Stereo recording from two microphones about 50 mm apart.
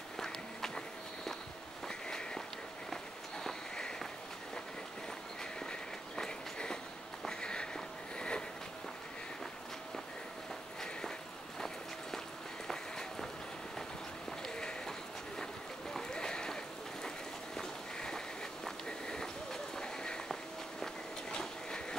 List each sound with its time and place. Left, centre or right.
0.2 s walk: centre
3.4 s sniff: centre
5.4 s walk: centre
7.2 s sniff: centre
10.8 s a sound: centre
12.6 s run: centre
14.5 s run: centre
15.9 s a sound: centre
17.6 s a sound: centre